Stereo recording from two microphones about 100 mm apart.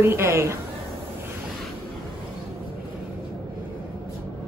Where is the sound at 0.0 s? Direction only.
25° right (ahead or behind).